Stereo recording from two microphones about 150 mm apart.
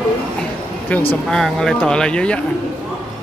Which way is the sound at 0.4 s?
10° left (ahead or behind).